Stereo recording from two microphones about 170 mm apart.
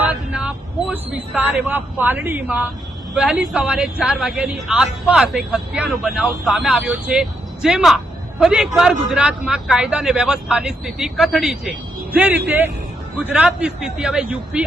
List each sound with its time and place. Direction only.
0.0 s a woman's voice: 5° right (ahead or behind)